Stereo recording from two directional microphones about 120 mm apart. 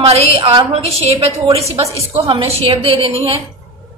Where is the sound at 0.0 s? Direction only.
55° right (ahead or behind).